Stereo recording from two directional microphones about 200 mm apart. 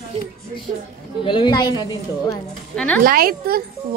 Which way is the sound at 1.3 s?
20° left (ahead or behind).